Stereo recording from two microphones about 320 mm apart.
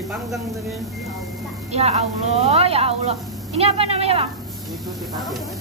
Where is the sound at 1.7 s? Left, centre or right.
Centre.